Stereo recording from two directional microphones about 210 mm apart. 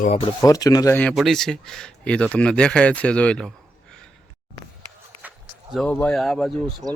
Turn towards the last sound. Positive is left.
turn(degrees=0)  # may be behind; listen again after turning